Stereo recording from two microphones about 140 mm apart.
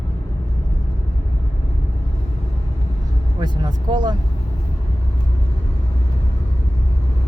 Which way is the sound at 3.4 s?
30° right (ahead or behind).